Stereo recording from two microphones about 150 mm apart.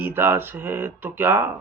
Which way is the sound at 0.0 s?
15° right (ahead or behind).